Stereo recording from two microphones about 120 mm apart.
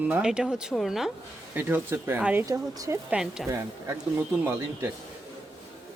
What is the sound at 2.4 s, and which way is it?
Speech, 30° right (ahead or behind).